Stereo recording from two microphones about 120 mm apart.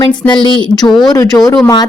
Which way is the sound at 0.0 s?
40° left (ahead or behind).